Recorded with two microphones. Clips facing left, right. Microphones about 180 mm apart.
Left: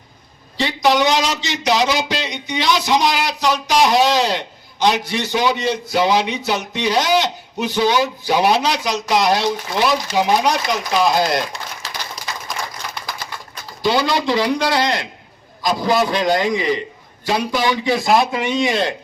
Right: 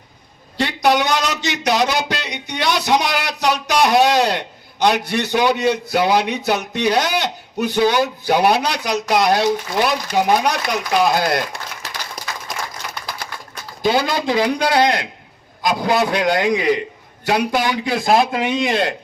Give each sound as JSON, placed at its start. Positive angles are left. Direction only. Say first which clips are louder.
{"t": 0.5, "sound": "speech", "louder": "even", "side_deg": -60}
{"t": 13.8, "sound": "a man's voice", "louder": "even", "side_deg": -50}